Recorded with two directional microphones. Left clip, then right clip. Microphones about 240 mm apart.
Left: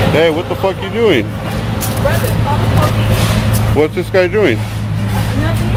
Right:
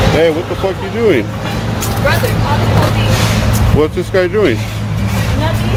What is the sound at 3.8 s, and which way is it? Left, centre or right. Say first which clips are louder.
Speech: left 1 dB; centre.